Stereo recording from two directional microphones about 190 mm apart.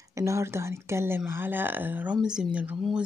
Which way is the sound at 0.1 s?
15° right (ahead or behind).